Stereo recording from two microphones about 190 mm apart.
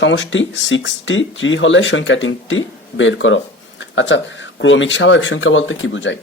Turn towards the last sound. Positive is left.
turn(degrees=80)